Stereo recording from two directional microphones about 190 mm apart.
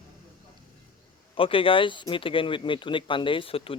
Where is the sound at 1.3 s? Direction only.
30° left (ahead or behind).